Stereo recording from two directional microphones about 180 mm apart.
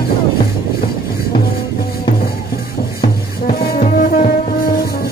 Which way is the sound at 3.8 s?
45° left (ahead or behind).